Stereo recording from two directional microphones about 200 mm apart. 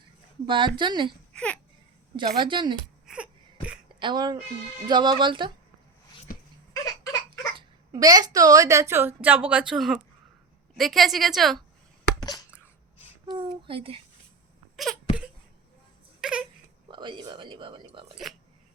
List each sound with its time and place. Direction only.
0.4 s a woman's voice: 25° right (ahead or behind)
1.3 s baby cry: 5° left (ahead or behind)
2.1 s a woman's voice: 25° right (ahead or behind)
3.1 s crying: 5° right (ahead or behind)
4.0 s a woman's voice: 20° right (ahead or behind)
6.3 s a sound: 45° left (ahead or behind)
6.7 s a sound: 20° left (ahead or behind)
7.3 s a woman's voice: 20° right (ahead or behind); by 11.6 s centre (ahead or behind)
12.2 s a sound: 15° left (ahead or behind)
13.3 s speech: 25° right (ahead or behind)
16.2 s baby cry: 5° right (ahead or behind)
16.9 s speech: 25° right (ahead or behind)